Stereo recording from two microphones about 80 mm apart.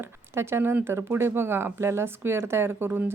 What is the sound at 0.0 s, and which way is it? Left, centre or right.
Speech, right.